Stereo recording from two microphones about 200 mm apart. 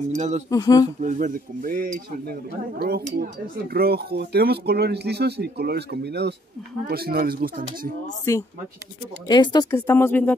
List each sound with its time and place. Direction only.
0.1 s speech: 35° right (ahead or behind)
0.5 s speech: 15° left (ahead or behind)
1.0 s a sound: 40° right (ahead or behind)
3.7 s speech: 50° right (ahead or behind)
6.9 s a sound: 50° right (ahead or behind)
8.3 s speech: 15° left (ahead or behind)